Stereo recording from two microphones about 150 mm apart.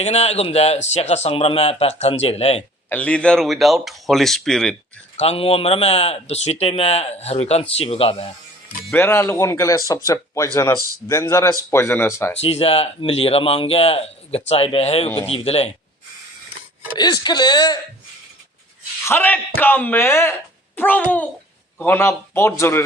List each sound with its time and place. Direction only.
0.0 s a man's voice: 45° left (ahead or behind)
2.9 s speech: 10° left (ahead or behind)
5.1 s a man's voice: 45° left (ahead or behind)
8.9 s speech: 15° left (ahead or behind)
12.4 s speech: 40° left (ahead or behind)
17.0 s speech: 25° left (ahead or behind)
19.0 s speech: 15° left (ahead or behind)